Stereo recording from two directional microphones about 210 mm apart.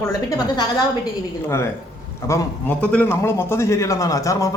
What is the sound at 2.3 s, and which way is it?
A man's voice, 10° left (ahead or behind).